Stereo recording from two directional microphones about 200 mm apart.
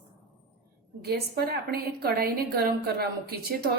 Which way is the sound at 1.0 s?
50° right (ahead or behind).